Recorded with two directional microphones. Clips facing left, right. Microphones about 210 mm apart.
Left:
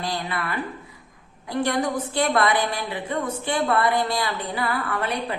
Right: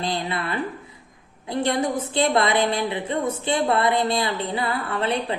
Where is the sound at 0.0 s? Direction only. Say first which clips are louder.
Right 2 dB; 25° right (ahead or behind).